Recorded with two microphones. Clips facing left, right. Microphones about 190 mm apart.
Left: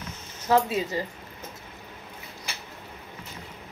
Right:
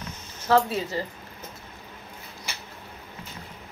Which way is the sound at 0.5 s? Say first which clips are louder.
Right 1 dB; 15° left (ahead or behind).